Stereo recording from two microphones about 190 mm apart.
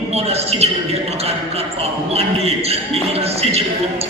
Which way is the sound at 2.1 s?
30° right (ahead or behind).